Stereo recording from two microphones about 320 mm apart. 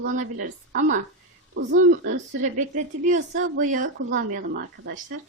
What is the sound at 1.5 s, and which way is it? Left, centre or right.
Speech, right.